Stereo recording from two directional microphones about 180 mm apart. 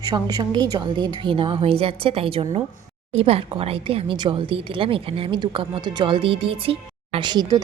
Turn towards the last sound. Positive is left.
turn(degrees=-20)  # may be behind; listen again after turning